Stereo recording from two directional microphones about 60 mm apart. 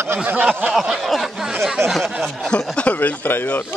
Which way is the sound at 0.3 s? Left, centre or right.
Right.